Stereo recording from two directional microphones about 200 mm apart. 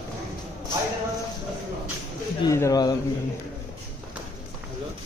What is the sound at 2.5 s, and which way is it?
Speech, 15° left (ahead or behind).